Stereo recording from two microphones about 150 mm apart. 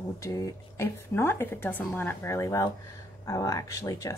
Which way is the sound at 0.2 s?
20° left (ahead or behind).